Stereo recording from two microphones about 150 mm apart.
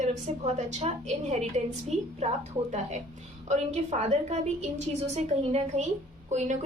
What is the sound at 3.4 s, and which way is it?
A woman's voice, 50° right (ahead or behind).